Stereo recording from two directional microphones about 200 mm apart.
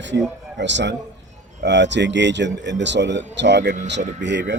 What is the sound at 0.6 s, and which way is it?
Speech, 60° right (ahead or behind).